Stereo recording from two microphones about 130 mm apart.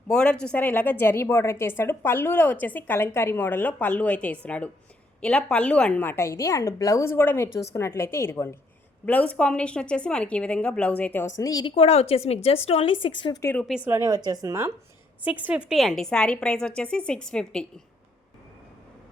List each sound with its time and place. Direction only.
0.1 s a woman's voice: 5° left (ahead or behind)
11.3 s a woman's voice: 30° left (ahead or behind)
11.6 s a woman's voice: 45° left (ahead or behind)
13.4 s a woman's voice: 15° left (ahead or behind)
13.8 s a woman's voice: 25° right (ahead or behind)
15.2 s a woman's voice: 10° right (ahead or behind); by 17.7 s 5° left (ahead or behind)